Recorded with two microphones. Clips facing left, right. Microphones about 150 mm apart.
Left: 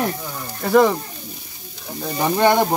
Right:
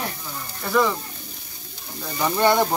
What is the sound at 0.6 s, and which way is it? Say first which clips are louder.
Speech: left 6 dB; 50° left (ahead or behind).